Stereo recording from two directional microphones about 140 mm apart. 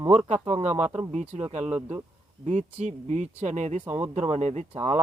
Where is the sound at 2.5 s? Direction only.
55° right (ahead or behind).